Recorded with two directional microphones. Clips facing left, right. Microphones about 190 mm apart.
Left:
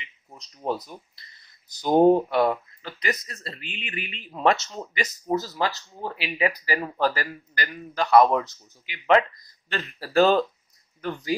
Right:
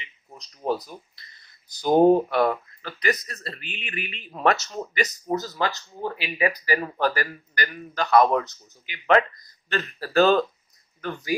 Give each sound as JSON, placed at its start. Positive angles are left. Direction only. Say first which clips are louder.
{"t": 0.4, "sound": "speech", "louder": "right 2 dB", "side_deg": 25}
{"t": 1.9, "sound": "speech", "louder": "right 1 dB", "side_deg": -5}
{"t": 2.2, "sound": "speech", "louder": "even", "side_deg": 25}